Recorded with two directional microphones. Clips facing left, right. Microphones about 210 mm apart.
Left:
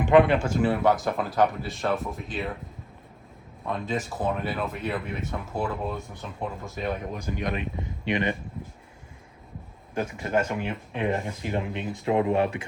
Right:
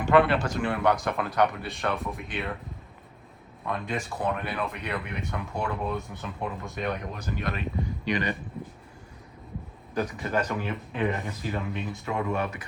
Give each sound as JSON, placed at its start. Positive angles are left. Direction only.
{"t": 0.0, "sound": "speech", "side_deg": 15}
{"t": 3.7, "sound": "speech", "side_deg": 0}
{"t": 9.9, "sound": "speech", "side_deg": 25}